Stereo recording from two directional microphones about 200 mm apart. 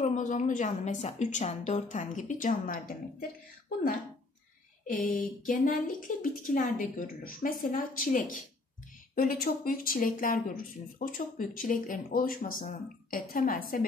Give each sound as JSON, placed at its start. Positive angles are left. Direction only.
{"t": 0.0, "sound": "a woman's voice", "side_deg": 40}
{"t": 5.4, "sound": "speech", "side_deg": 45}